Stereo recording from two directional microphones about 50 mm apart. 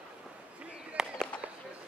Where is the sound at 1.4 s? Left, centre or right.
Right.